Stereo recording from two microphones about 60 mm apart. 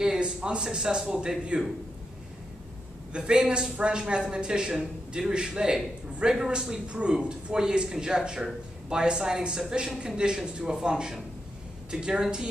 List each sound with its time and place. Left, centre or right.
0.0 s a woman's voice: centre
3.1 s a woman's voice: centre